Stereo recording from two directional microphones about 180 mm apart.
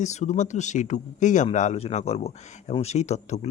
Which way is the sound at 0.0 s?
40° left (ahead or behind).